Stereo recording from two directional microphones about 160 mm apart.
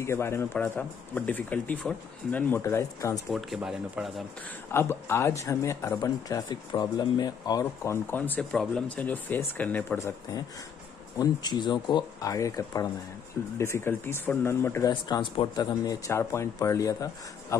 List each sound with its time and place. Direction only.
0.0 s speech: 15° left (ahead or behind)
3.3 s speech: centre (ahead or behind)
4.6 s speech: 15° left (ahead or behind)
11.1 s speech: 25° left (ahead or behind)
14.9 s speech: 25° left (ahead or behind)